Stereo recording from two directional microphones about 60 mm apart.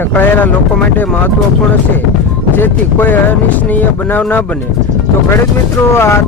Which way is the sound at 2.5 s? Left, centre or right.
Left.